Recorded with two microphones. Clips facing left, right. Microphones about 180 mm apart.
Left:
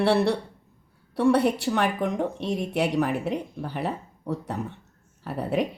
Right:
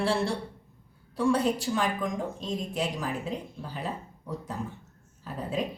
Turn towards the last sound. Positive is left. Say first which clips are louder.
# left 6 dB
turn(degrees=70)  # may be behind; listen again after turning